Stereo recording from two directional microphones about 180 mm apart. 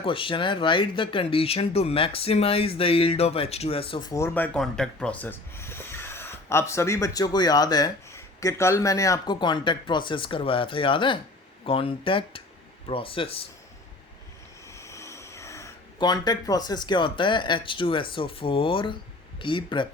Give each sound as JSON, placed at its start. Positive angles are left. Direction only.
{"t": 0.0, "sound": "speech", "side_deg": 30}
{"t": 14.7, "sound": "speech", "side_deg": 15}